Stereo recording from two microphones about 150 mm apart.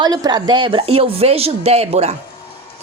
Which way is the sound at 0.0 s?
25° right (ahead or behind).